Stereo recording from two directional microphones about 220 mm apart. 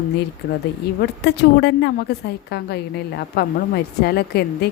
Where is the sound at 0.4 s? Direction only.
45° left (ahead or behind).